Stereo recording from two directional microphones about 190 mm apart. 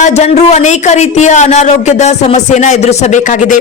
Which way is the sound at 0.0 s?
35° left (ahead or behind).